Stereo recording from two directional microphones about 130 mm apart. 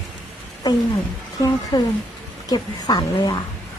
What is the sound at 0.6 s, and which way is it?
Speech, 30° left (ahead or behind).